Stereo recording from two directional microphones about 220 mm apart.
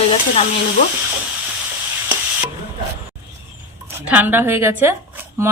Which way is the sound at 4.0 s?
5° right (ahead or behind).